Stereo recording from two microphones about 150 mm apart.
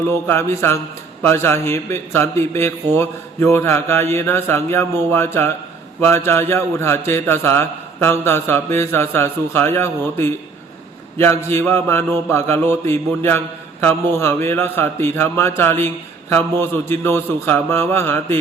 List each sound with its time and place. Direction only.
0.3 s a man's voice: 15° left (ahead or behind)